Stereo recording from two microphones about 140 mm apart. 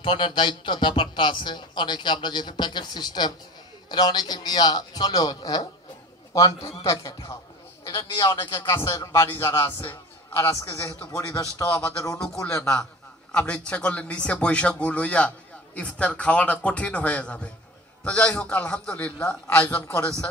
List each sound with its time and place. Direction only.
0.0 s a man's voice: 40° left (ahead or behind)
7.8 s a sound: 25° left (ahead or behind)
8.3 s a man's voice: 20° left (ahead or behind)